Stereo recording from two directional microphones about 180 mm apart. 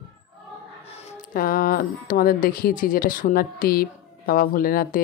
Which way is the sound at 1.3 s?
55° left (ahead or behind).